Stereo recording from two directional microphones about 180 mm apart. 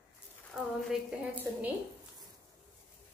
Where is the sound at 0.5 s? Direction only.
10° right (ahead or behind).